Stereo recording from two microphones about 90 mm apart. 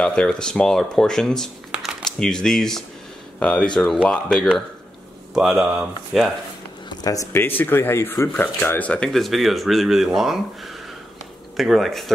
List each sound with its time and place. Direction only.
0.0 s speech: 10° left (ahead or behind)
1.7 s a sound: 5° right (ahead or behind)
2.0 s speech: 5° left (ahead or behind)
5.3 s speech: 5° right (ahead or behind)
6.9 s a sound: 45° left (ahead or behind)
7.3 s speech: 20° left (ahead or behind)
9.1 s speech: centre (ahead or behind)